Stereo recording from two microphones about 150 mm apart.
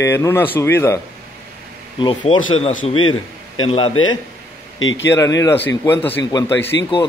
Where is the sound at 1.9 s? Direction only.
35° left (ahead or behind).